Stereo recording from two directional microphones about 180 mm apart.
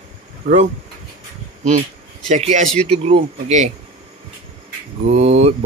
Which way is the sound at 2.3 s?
40° right (ahead or behind).